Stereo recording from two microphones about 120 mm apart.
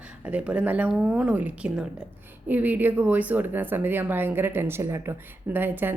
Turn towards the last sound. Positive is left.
turn(degrees=-15)  # may be behind; listen again after turning